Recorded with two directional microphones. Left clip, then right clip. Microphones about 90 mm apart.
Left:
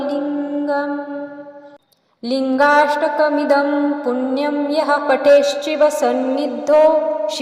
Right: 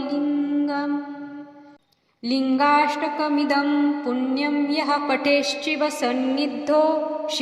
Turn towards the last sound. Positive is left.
turn(degrees=20)  # may be behind; listen again after turning